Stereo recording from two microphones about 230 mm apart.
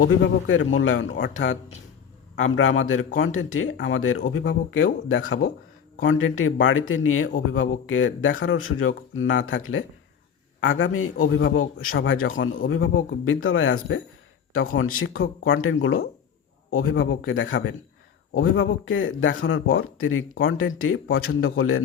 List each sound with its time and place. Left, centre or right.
0.2 s speech: left
15.0 s speech: left